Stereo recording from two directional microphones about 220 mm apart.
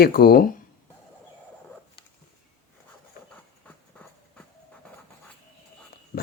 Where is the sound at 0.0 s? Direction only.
45° left (ahead or behind).